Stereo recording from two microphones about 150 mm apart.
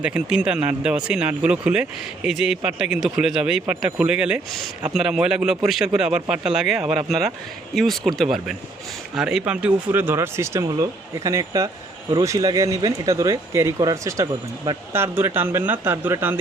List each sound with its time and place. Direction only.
0.0 s speech: 5° right (ahead or behind)